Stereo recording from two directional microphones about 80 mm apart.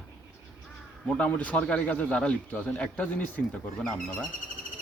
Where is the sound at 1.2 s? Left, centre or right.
Centre.